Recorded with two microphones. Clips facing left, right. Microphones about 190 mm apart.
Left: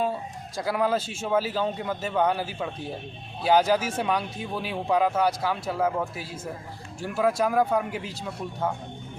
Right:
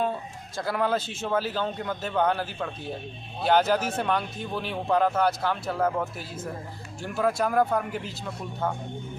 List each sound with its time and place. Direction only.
0.5 s speech: 10° left (ahead or behind)